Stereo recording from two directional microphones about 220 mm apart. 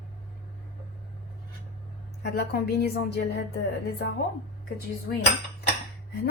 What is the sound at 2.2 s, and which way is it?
A woman's voice, 50° left (ahead or behind).